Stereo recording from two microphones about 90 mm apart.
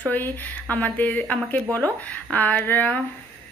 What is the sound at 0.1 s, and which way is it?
Speech, 20° left (ahead or behind).